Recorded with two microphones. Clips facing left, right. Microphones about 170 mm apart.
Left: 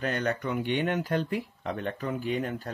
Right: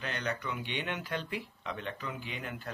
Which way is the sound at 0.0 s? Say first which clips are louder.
Left 7 dB; 45° left (ahead or behind).